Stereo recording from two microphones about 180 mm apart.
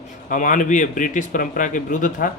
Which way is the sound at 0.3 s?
45° left (ahead or behind).